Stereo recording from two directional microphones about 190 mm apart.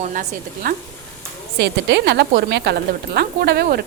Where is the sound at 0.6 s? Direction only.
55° right (ahead or behind).